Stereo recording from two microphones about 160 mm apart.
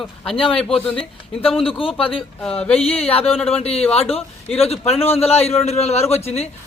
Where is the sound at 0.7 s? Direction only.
35° left (ahead or behind).